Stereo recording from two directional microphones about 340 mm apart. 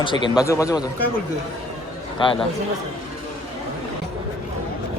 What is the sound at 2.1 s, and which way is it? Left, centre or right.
Speech, centre.